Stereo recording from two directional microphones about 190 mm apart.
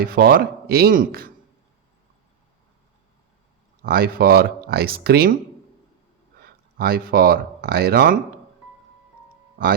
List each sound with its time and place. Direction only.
0.0 s speech: 50° right (ahead or behind)
3.8 s speech: 50° right (ahead or behind)
6.4 s speech: 50° right (ahead or behind)